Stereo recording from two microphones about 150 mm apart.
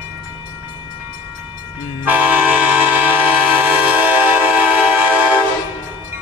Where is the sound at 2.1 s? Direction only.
10° right (ahead or behind).